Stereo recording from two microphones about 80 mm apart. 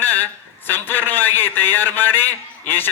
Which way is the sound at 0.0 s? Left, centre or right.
Left.